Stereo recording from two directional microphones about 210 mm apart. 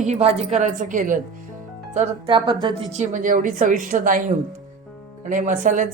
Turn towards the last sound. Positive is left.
turn(degrees=-40)  # may be behind; listen again after turning